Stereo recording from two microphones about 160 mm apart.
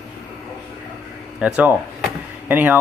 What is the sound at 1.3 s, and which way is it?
Door, 5° right (ahead or behind).